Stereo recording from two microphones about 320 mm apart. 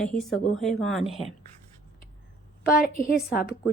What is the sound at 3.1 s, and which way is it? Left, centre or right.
Speech, left.